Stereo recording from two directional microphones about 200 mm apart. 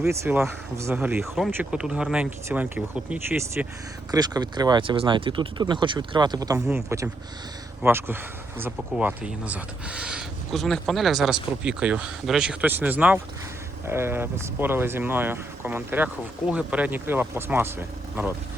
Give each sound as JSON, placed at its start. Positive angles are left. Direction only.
{"t": 0.1, "sound": "speech", "side_deg": -10}
{"t": 4.1, "sound": "speech", "side_deg": -20}